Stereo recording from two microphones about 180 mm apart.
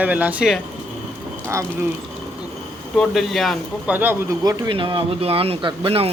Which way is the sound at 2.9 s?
Centre (ahead or behind).